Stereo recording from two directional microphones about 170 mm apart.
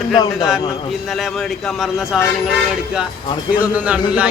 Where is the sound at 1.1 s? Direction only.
Centre (ahead or behind).